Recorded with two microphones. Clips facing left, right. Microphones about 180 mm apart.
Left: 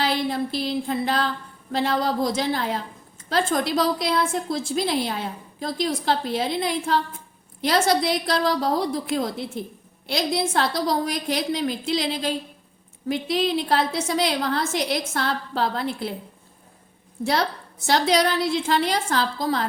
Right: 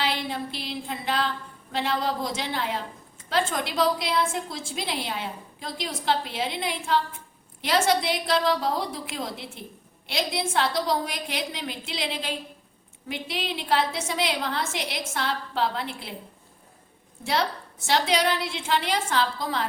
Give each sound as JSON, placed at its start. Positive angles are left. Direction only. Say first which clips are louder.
{"t": 0.0, "sound": "a sound", "louder": "left 5 dB", "side_deg": 40}
{"t": 1.7, "sound": "a woman's voice", "louder": "left 4 dB", "side_deg": 40}
{"t": 17.2, "sound": "a woman's voice", "louder": "left 3 dB", "side_deg": 40}